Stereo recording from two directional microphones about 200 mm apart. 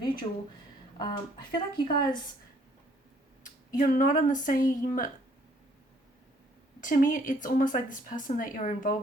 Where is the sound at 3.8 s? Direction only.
40° left (ahead or behind).